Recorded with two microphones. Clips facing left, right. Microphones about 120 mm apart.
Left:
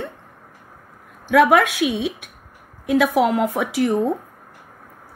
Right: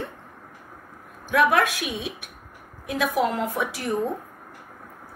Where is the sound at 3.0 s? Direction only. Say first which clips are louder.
Left 5 dB; 75° left (ahead or behind).